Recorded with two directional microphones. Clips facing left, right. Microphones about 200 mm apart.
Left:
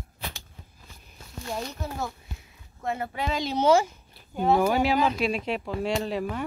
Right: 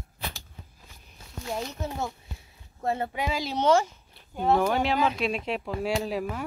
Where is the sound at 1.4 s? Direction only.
5° right (ahead or behind).